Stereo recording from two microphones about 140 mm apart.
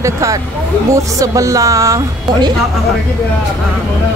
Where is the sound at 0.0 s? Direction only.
25° right (ahead or behind).